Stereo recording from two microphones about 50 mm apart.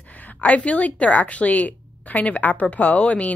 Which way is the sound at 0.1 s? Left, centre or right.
Left.